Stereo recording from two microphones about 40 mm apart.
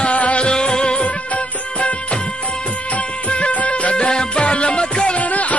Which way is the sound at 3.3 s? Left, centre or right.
Left.